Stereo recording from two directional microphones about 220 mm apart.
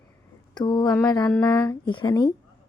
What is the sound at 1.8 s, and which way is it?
Speech, 20° left (ahead or behind).